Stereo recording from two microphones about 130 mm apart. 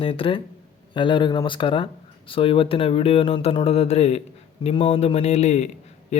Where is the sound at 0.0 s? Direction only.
40° left (ahead or behind).